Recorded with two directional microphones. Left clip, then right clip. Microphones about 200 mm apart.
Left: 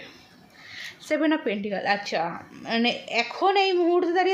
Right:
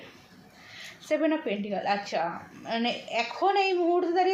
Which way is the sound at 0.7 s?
35° left (ahead or behind).